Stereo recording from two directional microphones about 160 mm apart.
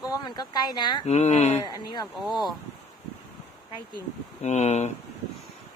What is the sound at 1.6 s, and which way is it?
Speech, 25° left (ahead or behind).